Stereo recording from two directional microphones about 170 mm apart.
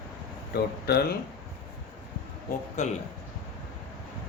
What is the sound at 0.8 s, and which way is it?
Speech, 70° left (ahead or behind).